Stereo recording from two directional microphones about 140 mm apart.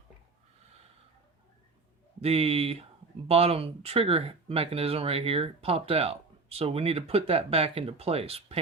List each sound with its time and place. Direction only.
2.2 s speech: 45° right (ahead or behind)